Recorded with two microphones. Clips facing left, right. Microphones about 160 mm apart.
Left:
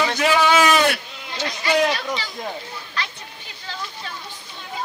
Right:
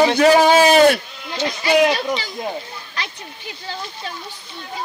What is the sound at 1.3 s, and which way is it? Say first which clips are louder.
Speech: right 4 dB; 20° right (ahead or behind).